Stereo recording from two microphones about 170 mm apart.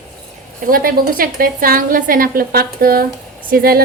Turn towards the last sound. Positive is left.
turn(degrees=-60)  # may be behind; listen again after turning